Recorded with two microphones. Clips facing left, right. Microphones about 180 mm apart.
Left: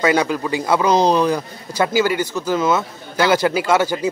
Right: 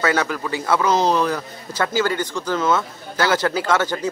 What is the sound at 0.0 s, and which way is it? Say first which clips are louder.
A man's voice: left 4 dB; 15° left (ahead or behind).